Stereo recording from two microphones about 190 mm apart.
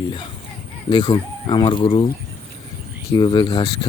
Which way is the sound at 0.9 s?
25° left (ahead or behind).